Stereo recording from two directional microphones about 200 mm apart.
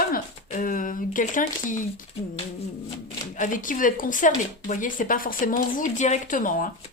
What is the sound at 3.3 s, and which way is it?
Speech, 40° left (ahead or behind).